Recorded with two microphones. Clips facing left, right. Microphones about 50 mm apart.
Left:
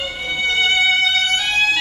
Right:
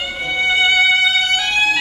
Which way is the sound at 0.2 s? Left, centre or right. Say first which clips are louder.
Right 3 dB; centre.